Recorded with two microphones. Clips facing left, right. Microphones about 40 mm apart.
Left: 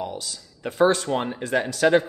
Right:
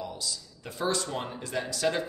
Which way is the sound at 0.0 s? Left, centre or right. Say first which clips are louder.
Left 5 dB; left.